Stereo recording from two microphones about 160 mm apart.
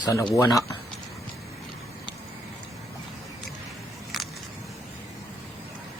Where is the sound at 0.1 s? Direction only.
20° left (ahead or behind).